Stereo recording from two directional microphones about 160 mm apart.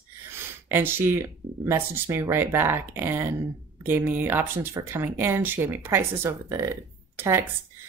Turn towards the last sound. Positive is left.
turn(degrees=-15)  # may be behind; listen again after turning